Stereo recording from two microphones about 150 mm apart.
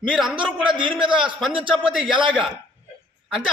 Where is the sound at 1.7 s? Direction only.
5° right (ahead or behind).